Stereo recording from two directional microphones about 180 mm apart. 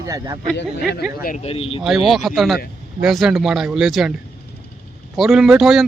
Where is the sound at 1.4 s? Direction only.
30° left (ahead or behind).